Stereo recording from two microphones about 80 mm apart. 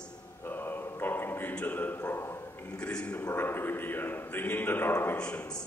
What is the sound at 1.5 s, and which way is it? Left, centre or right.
Speech, centre.